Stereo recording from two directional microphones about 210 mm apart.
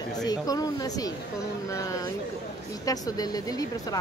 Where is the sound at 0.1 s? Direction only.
20° left (ahead or behind).